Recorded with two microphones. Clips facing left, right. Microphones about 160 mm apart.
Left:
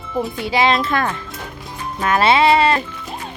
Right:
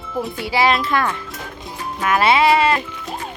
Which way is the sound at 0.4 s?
20° left (ahead or behind).